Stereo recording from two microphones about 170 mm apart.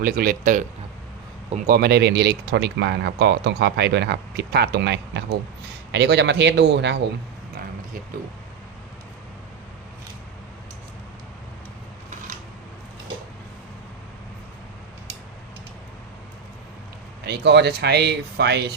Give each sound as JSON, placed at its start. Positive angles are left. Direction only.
{"t": 0.0, "sound": "speech", "side_deg": -55}
{"t": 17.2, "sound": "speech", "side_deg": -80}